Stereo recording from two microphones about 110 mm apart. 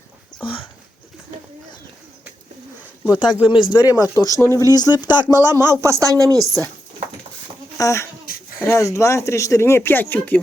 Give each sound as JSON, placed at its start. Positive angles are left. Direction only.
{"t": 3.1, "sound": "speech", "side_deg": 45}
{"t": 4.4, "sound": "speech", "side_deg": 20}
{"t": 4.6, "sound": "speech", "side_deg": 35}
{"t": 5.7, "sound": "speech", "side_deg": -25}
{"t": 7.8, "sound": "speech", "side_deg": 25}